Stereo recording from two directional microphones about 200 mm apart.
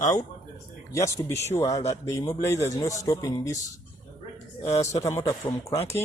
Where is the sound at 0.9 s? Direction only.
15° left (ahead or behind).